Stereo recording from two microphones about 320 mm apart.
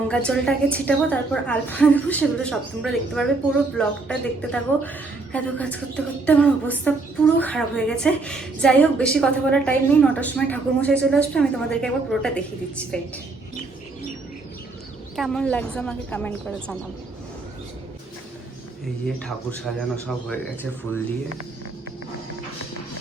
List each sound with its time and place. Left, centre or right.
0.1 s a woman's voice: centre
15.1 s a woman's voice: centre
19.0 s a woman's voice: centre